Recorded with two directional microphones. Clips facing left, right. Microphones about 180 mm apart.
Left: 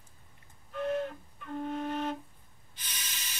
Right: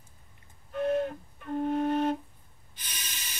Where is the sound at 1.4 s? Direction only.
45° right (ahead or behind).